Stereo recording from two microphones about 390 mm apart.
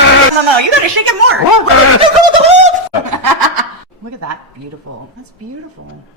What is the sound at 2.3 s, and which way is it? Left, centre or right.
Bird, centre.